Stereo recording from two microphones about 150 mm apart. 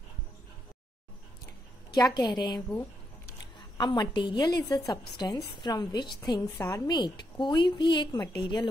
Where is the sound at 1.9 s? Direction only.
25° left (ahead or behind).